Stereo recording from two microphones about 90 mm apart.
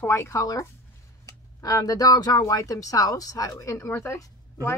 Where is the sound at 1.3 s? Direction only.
40° left (ahead or behind).